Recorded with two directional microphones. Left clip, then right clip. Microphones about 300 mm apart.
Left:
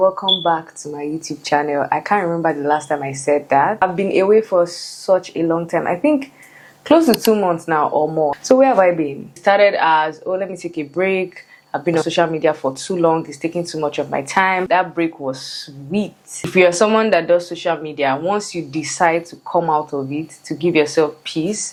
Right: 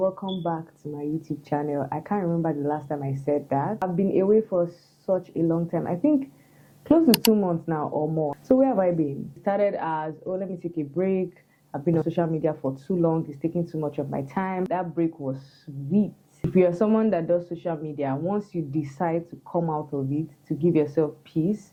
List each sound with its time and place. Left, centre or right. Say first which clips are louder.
0.0 s speech: left 12 dB; centre
0.4 s speech: left 12 dB; centre
7.9 s speech: left 10 dB; left
20.5 s speech: left 7 dB; centre